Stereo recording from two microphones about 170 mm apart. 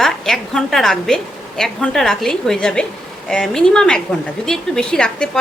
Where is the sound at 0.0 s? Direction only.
Centre (ahead or behind).